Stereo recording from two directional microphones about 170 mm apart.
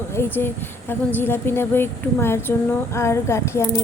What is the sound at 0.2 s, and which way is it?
A woman's voice, 15° left (ahead or behind).